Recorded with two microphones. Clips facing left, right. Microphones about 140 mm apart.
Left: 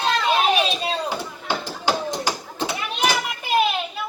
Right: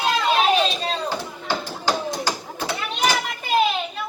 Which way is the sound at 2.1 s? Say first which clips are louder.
Even; 10° left (ahead or behind).